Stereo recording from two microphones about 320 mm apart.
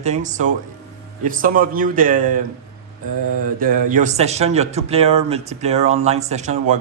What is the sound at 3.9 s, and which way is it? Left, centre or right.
A man's voice, right.